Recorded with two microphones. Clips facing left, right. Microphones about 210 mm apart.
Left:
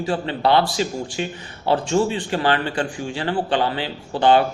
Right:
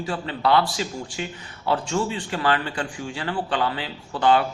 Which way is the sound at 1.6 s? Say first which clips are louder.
Left 5 dB; 30° left (ahead or behind).